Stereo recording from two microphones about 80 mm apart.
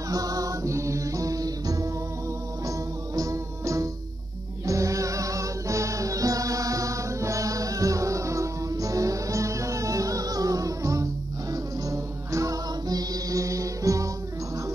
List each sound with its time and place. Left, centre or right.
0.1 s music: right
3.2 s music: right